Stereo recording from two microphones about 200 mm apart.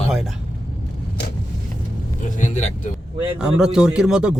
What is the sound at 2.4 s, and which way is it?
Speech, 35° left (ahead or behind).